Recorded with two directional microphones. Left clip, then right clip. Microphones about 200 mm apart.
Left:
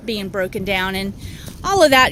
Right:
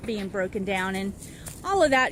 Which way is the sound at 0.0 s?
50° left (ahead or behind).